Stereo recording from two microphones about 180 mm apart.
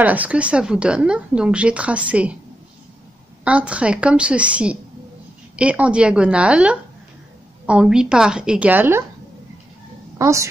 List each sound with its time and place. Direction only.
0.0 s a woman's voice: 10° right (ahead or behind)
3.4 s a woman's voice: 5° right (ahead or behind)
10.1 s a woman's voice: 15° right (ahead or behind)